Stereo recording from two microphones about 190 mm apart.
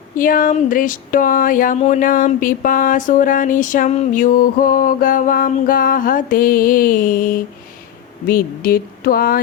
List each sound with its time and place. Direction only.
0.2 s speech: 45° left (ahead or behind)